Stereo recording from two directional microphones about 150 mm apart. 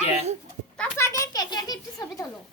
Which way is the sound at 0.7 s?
15° left (ahead or behind).